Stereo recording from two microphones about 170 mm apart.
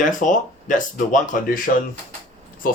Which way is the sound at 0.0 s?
50° left (ahead or behind).